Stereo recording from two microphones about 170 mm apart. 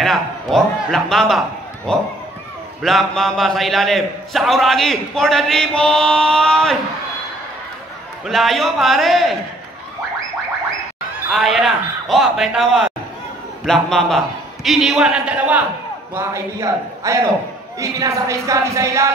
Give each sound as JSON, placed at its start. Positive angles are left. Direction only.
{"t": 0.0, "sound": "a man's voice", "side_deg": 0}
{"t": 8.3, "sound": "a man's voice", "side_deg": 0}
{"t": 11.3, "sound": "a man's voice", "side_deg": 0}